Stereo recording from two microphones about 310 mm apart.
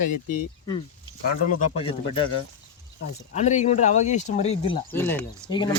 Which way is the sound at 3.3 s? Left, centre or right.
Left.